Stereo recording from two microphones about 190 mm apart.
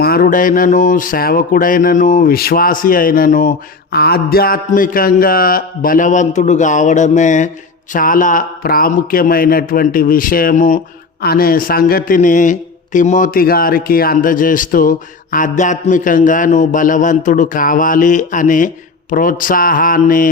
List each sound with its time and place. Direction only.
0.0 s a man's voice: 50° left (ahead or behind)
3.9 s a man's voice: 55° left (ahead or behind)